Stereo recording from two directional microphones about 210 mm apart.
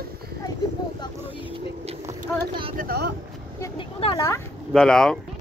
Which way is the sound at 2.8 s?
50° right (ahead or behind).